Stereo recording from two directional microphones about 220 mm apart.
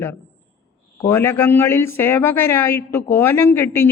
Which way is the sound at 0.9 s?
10° left (ahead or behind).